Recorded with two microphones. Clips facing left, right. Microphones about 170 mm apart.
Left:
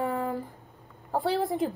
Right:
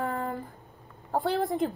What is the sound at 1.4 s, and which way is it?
Speech, centre (ahead or behind).